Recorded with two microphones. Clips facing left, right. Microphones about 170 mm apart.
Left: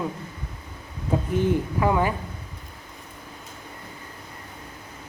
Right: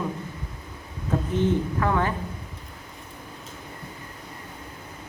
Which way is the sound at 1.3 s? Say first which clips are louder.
Even; 10° left (ahead or behind).